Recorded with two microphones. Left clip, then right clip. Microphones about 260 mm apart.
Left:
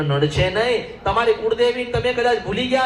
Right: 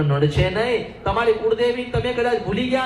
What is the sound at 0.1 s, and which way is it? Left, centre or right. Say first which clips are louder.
A man's voice: left 3 dB; left.